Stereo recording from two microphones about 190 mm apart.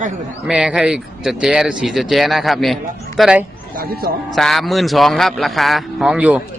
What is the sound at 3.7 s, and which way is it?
Speech, 50° right (ahead or behind).